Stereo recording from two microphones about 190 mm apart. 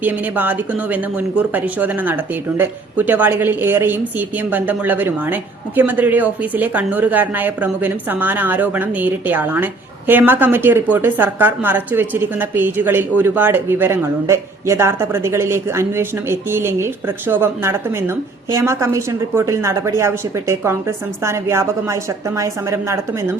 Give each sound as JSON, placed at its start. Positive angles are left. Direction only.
{"t": 0.0, "sound": "speech", "side_deg": -10}